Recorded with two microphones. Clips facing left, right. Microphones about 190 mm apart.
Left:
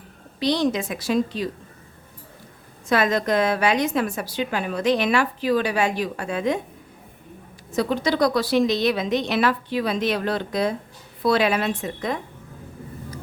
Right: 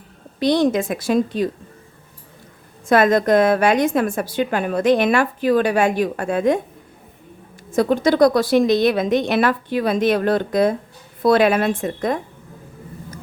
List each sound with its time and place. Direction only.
0.3 s a woman's voice: 50° right (ahead or behind)
2.9 s a woman's voice: 50° right (ahead or behind)
7.7 s a woman's voice: 50° right (ahead or behind)